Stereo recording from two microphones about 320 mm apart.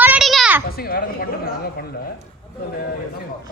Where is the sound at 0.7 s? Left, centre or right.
Left.